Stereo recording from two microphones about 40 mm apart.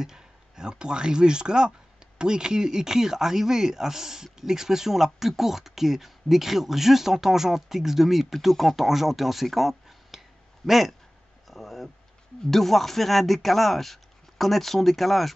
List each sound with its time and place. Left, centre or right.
0.0 s speech: centre
11.4 s a sound: centre
12.4 s speech: centre